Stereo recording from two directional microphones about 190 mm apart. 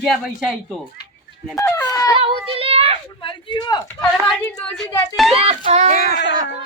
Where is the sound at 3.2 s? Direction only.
25° left (ahead or behind).